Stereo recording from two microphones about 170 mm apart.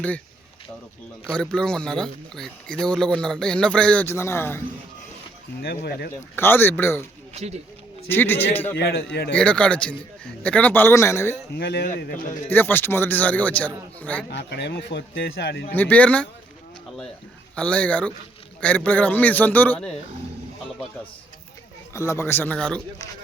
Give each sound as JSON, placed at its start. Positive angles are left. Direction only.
{"t": 1.3, "sound": "speech", "side_deg": 5}
{"t": 6.1, "sound": "a man's voice", "side_deg": 15}
{"t": 7.3, "sound": "speech", "side_deg": -40}
{"t": 8.1, "sound": "a man's voice", "side_deg": 10}
{"t": 8.7, "sound": "speech", "side_deg": 70}
{"t": 9.3, "sound": "a man's voice", "side_deg": 5}
{"t": 11.5, "sound": "speech", "side_deg": 80}
{"t": 12.5, "sound": "a man's voice", "side_deg": 10}
{"t": 14.3, "sound": "a man's voice", "side_deg": 85}
{"t": 15.7, "sound": "a man's voice", "side_deg": 10}
{"t": 17.5, "sound": "a man's voice", "side_deg": 5}
{"t": 21.9, "sound": "a man's voice", "side_deg": 15}